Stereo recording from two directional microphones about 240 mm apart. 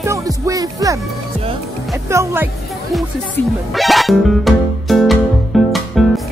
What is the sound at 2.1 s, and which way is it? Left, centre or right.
Music, centre.